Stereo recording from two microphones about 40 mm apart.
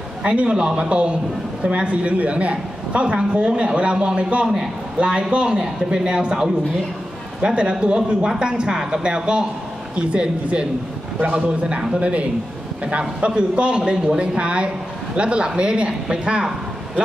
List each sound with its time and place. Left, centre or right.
0.2 s a man's voice: right